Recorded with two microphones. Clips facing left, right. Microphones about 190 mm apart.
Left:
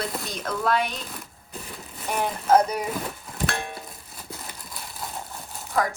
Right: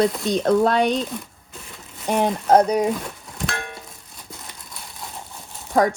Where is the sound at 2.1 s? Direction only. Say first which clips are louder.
Right 4 dB; 30° right (ahead or behind).